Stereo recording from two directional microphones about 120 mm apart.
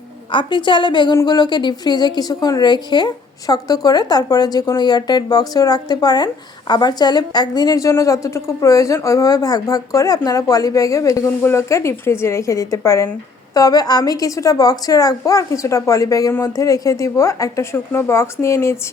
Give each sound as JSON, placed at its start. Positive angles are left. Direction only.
{"t": 0.3, "sound": "a woman's voice", "side_deg": 40}